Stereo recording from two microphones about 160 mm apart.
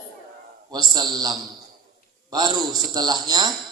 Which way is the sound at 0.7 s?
25° right (ahead or behind).